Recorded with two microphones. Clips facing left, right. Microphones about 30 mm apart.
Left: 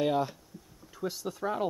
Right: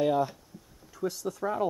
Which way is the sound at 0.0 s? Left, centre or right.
Left.